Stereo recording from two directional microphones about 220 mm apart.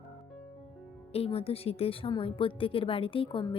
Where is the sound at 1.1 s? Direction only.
25° left (ahead or behind).